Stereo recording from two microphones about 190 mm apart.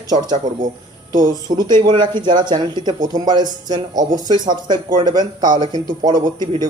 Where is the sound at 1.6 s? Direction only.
25° right (ahead or behind).